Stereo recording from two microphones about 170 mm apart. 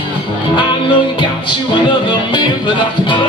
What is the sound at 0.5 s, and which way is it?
Music, 30° left (ahead or behind).